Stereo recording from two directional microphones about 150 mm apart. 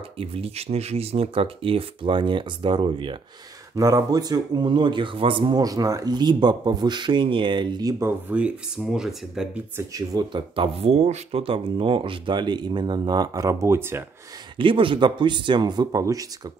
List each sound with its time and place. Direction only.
0.2 s speech: 40° right (ahead or behind)
3.7 s speech: 25° right (ahead or behind)
8.0 s speech: 10° right (ahead or behind)
9.8 s speech: 25° right (ahead or behind)
14.6 s speech: 35° right (ahead or behind)